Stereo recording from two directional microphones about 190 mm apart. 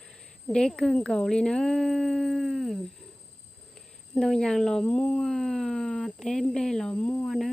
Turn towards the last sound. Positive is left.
turn(degrees=0)  # may be behind; listen again after turning